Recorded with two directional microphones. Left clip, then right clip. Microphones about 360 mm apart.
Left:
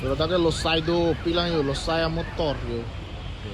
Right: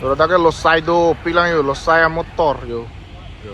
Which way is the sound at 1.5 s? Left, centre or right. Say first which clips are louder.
Right 10 dB; right.